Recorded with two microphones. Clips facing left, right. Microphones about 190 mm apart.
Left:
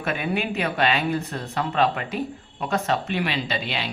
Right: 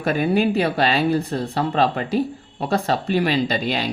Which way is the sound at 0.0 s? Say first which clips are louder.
Right 7 dB; 35° right (ahead or behind).